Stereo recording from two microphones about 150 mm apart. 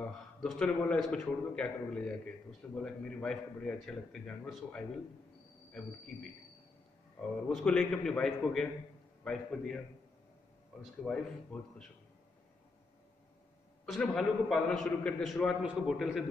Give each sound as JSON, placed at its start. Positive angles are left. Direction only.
{"t": 0.0, "sound": "a man's voice", "side_deg": 5}
{"t": 7.2, "sound": "a man's voice", "side_deg": 5}
{"t": 11.0, "sound": "a man's voice", "side_deg": 0}
{"t": 13.8, "sound": "a man's voice", "side_deg": 0}